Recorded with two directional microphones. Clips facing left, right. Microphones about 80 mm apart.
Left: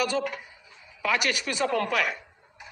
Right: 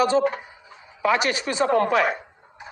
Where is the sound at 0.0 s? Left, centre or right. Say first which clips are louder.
Right 8 dB; right.